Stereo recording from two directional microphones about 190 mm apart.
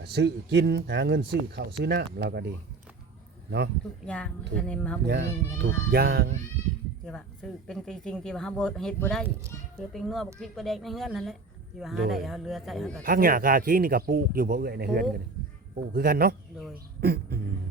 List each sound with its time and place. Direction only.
0.0 s speech: 60° right (ahead or behind)
4.0 s speech: 5° left (ahead or behind)
5.0 s speech: 70° right (ahead or behind); by 6.2 s 55° right (ahead or behind)
7.0 s speech: 5° left (ahead or behind)
13.0 s speech: 50° right (ahead or behind)